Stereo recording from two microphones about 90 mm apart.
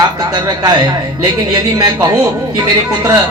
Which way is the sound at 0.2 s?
50° right (ahead or behind).